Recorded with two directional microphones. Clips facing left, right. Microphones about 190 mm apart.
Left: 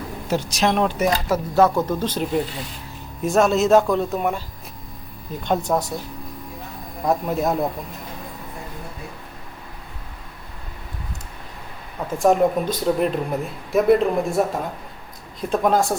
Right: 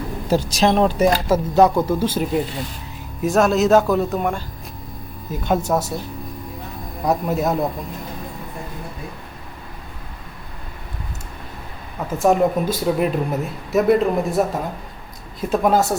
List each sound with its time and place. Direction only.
0.3 s speech: 35° right (ahead or behind); by 5.9 s 5° right (ahead or behind)
7.0 s speech: centre (ahead or behind)
12.2 s speech: centre (ahead or behind)